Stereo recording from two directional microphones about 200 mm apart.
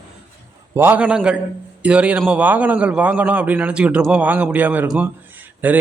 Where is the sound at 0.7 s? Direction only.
10° right (ahead or behind).